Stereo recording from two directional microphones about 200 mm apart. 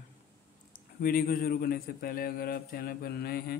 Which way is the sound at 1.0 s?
45° left (ahead or behind).